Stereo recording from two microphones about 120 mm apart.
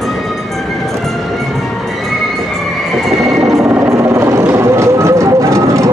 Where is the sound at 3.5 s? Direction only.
15° right (ahead or behind).